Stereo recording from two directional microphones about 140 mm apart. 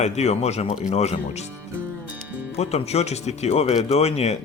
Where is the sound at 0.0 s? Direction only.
50° left (ahead or behind).